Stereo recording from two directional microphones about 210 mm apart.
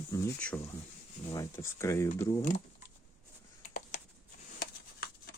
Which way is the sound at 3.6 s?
35° left (ahead or behind).